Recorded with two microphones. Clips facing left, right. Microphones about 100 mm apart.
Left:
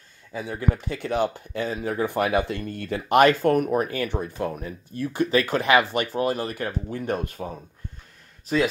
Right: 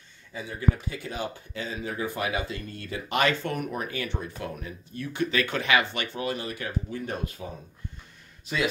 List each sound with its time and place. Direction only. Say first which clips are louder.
0.3 s speech: left 2 dB; 60° left (ahead or behind); by 5.2 s 40° left (ahead or behind)
5.4 s speech: left 4 dB; centre (ahead or behind)
6.1 s speech: left 5 dB; 45° left (ahead or behind)